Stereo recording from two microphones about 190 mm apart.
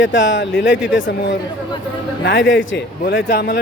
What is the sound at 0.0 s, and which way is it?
Speech, 75° left (ahead or behind).